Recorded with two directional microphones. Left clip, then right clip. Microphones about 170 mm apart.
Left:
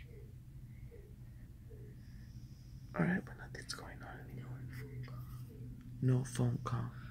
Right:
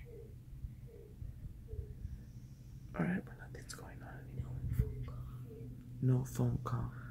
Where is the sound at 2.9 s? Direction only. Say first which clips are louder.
Left 3 dB; 30° left (ahead or behind).